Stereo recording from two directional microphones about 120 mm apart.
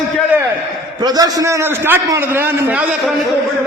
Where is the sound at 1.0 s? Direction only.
35° right (ahead or behind); by 2.8 s 15° right (ahead or behind).